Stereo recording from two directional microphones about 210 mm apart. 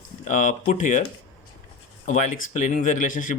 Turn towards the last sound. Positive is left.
turn(degrees=40)  # may be behind; listen again after turning